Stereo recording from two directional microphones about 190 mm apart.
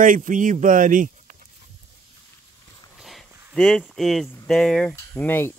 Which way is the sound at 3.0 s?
Centre (ahead or behind).